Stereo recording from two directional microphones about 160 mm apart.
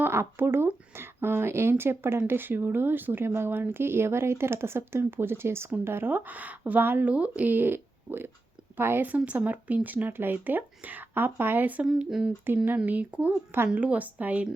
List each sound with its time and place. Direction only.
0.0 s speech: 15° right (ahead or behind)